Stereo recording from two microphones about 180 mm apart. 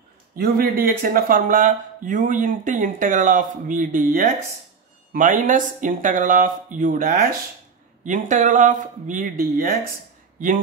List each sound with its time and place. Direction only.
0.4 s speech: 55° right (ahead or behind)
8.0 s speech: 45° right (ahead or behind)